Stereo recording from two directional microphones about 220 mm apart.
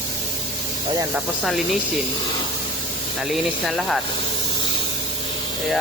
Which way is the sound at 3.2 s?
Centre (ahead or behind).